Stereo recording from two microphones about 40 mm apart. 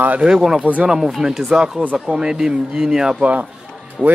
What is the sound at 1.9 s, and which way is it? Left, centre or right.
Speech, right.